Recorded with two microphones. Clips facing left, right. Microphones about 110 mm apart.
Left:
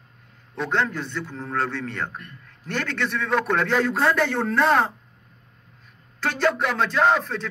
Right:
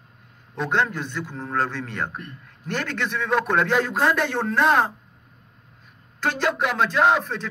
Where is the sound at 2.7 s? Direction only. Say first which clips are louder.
Even; 40° right (ahead or behind).